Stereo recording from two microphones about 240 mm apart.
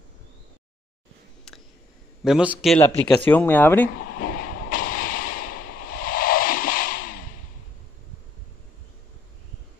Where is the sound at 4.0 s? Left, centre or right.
Left.